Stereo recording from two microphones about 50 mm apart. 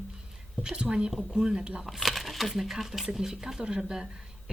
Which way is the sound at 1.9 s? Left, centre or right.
Centre.